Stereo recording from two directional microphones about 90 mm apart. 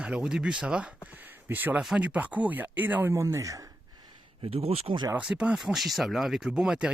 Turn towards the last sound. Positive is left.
turn(degrees=-10)  # may be behind; listen again after turning